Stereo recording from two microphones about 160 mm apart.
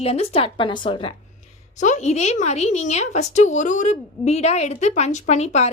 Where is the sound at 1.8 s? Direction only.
50° left (ahead or behind).